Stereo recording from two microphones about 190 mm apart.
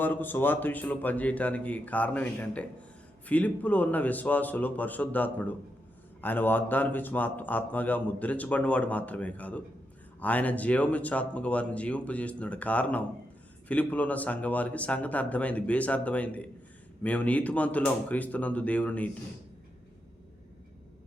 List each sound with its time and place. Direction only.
0.0 s speech: 10° left (ahead or behind)